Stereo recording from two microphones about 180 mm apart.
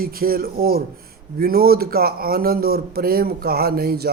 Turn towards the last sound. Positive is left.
turn(degrees=-60)  # may be behind; listen again after turning